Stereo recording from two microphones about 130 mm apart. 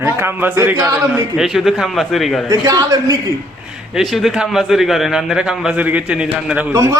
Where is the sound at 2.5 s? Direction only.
25° right (ahead or behind).